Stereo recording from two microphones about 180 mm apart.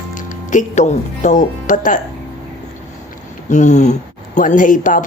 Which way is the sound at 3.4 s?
40° left (ahead or behind).